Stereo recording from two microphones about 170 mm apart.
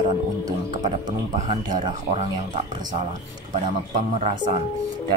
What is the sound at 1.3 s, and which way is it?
Speech, 45° right (ahead or behind).